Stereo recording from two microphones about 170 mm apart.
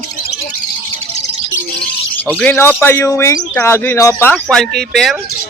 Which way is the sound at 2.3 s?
10° left (ahead or behind).